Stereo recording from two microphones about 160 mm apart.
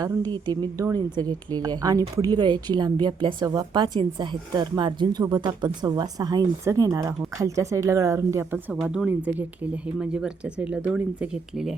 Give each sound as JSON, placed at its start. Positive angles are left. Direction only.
{"t": 0.0, "sound": "a woman's voice", "side_deg": -25}
{"t": 8.7, "sound": "speech", "side_deg": -5}